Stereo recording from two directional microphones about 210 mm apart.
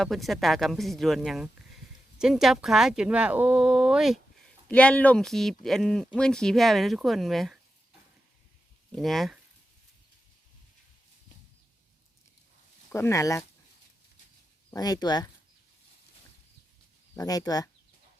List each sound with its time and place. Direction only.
0.0 s speech: centre (ahead or behind)
8.9 s speech: centre (ahead or behind)
12.9 s speech: 15° left (ahead or behind)
14.7 s speech: 20° left (ahead or behind)
17.2 s speech: 15° left (ahead or behind)